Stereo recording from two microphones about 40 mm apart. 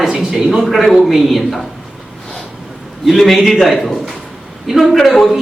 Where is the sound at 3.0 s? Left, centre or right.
Centre.